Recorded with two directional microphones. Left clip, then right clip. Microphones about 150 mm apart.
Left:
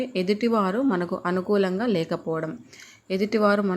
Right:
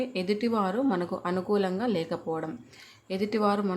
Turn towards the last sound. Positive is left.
turn(degrees=25)  # may be behind; listen again after turning